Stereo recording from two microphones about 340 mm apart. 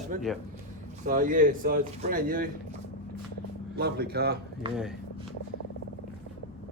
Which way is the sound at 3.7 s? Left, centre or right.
Right.